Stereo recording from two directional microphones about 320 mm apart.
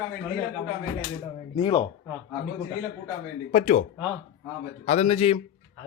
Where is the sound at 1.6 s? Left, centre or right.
Centre.